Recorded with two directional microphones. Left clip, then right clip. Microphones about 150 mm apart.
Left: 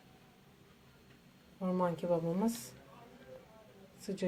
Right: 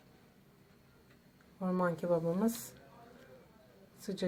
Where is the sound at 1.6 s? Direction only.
15° right (ahead or behind).